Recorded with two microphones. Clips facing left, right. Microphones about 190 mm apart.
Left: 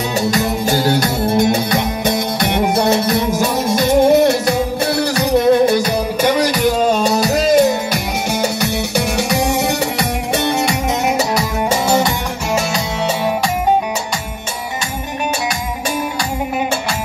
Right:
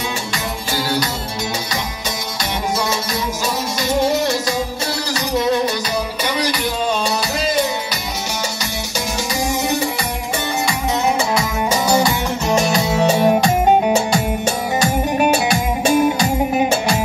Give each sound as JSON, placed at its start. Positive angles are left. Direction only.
{"t": 0.3, "sound": "music", "side_deg": 45}
{"t": 6.2, "sound": "music", "side_deg": 45}
{"t": 11.3, "sound": "music", "side_deg": 25}
{"t": 13.0, "sound": "music", "side_deg": -15}